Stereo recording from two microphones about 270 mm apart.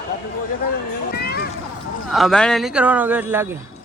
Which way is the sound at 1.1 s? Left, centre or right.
Left.